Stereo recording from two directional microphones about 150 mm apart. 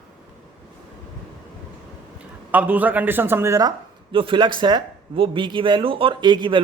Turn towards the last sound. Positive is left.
turn(degrees=-30)  # may be behind; listen again after turning